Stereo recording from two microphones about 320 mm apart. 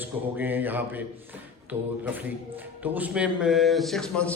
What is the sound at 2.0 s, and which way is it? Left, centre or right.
A man's voice, centre.